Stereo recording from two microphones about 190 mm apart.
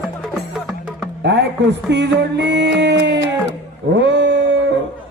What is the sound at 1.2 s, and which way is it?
Music, 65° right (ahead or behind).